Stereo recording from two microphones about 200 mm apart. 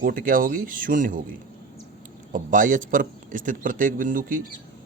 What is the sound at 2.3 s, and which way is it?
Speech, 40° right (ahead or behind).